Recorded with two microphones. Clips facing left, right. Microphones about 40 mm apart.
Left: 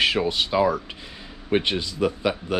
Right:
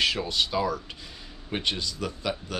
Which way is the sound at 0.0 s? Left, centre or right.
Left.